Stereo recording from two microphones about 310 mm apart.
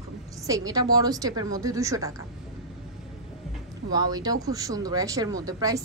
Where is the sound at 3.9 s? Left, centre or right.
Centre.